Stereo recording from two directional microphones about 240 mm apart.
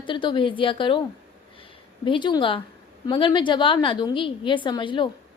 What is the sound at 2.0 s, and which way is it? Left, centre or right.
A woman's voice, centre.